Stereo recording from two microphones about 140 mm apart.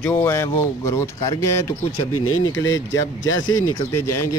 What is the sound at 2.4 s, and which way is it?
Speech, 25° left (ahead or behind).